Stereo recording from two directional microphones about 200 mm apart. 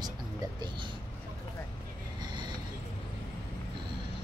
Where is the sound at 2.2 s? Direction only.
20° right (ahead or behind).